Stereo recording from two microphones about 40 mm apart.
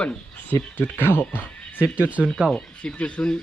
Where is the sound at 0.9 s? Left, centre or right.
Left.